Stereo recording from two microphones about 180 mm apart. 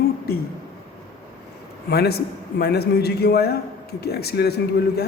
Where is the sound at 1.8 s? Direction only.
60° left (ahead or behind).